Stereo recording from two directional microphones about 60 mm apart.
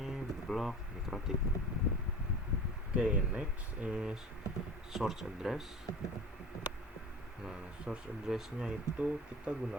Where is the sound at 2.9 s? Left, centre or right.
Centre.